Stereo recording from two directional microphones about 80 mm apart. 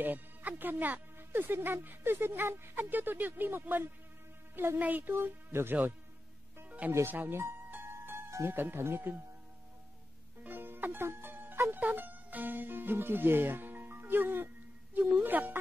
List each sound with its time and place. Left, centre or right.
0.0 s speech: right
6.6 s music: centre
6.9 s speech: right
7.2 s music: right
10.4 s music: right
15.0 s a sound: right